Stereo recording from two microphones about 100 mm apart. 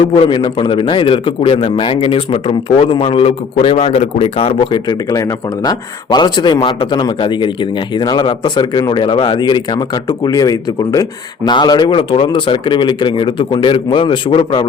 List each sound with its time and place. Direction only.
0.3 s a man's voice: 55° left (ahead or behind)
5.6 s a man's voice: 45° left (ahead or behind)